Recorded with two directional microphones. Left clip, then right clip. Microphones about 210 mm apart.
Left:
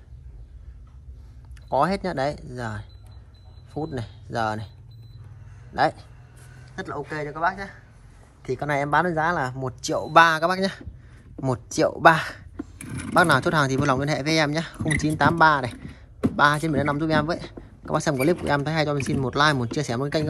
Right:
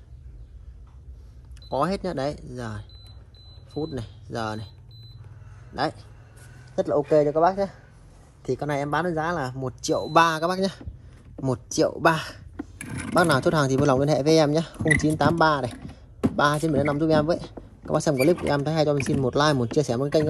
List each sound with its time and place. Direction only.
1.7 s speech: 15° right (ahead or behind)
5.8 s speech: 10° right (ahead or behind)
6.7 s a man's voice: 30° right (ahead or behind)
8.5 s speech: centre (ahead or behind)
9.8 s speech: 15° right (ahead or behind)
12.5 s a sound: centre (ahead or behind)
13.1 s speech: 15° right (ahead or behind)